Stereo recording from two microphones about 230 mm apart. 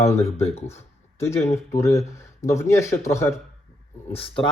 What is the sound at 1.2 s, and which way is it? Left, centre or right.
Speech, centre.